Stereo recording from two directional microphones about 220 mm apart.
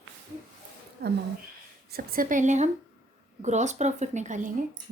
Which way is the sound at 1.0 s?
45° right (ahead or behind).